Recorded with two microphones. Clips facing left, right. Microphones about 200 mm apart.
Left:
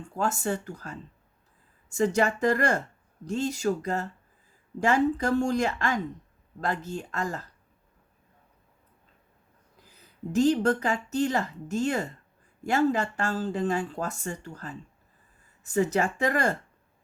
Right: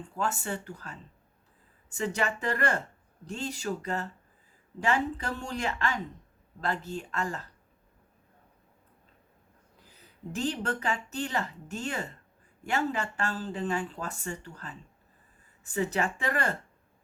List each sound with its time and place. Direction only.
0.2 s speech: 40° left (ahead or behind)
10.3 s speech: 40° left (ahead or behind)